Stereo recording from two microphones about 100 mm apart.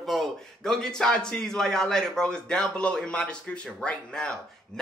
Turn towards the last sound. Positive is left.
turn(degrees=10)  # may be behind; listen again after turning